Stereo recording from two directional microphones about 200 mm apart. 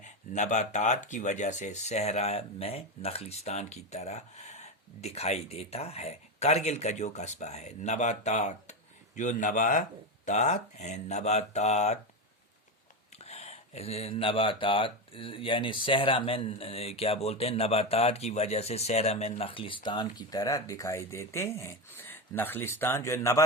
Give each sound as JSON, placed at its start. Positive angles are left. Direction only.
{"t": 0.0, "sound": "speech", "side_deg": 35}
{"t": 13.1, "sound": "speech", "side_deg": 30}